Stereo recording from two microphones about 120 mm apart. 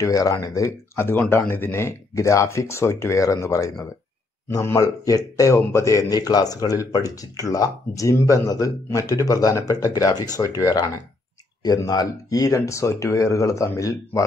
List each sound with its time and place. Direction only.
0.0 s a man's voice: 30° left (ahead or behind)